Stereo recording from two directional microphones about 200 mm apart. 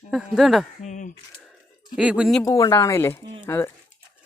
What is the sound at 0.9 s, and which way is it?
Speech, 40° left (ahead or behind).